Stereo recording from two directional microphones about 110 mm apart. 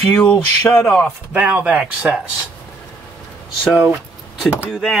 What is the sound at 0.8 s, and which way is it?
Speech, 10° left (ahead or behind).